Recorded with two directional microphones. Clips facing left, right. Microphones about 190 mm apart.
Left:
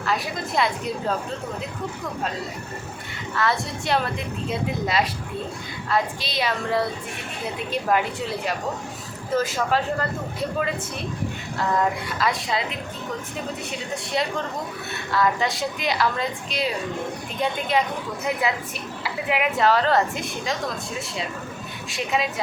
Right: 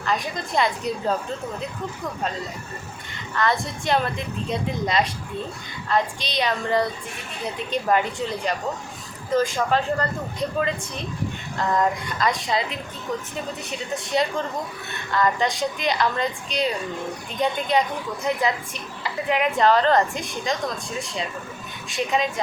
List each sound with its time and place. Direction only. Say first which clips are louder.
0.0 s a woman's voice: even; 5° left (ahead or behind)
3.3 s a woman's voice: right 1 dB; centre (ahead or behind)
11.8 s a woman's voice: right 1 dB; 5° left (ahead or behind)
19.0 s a woman's voice: right 2 dB; 5° left (ahead or behind)
21.8 s a woman's voice: right 2 dB; centre (ahead or behind)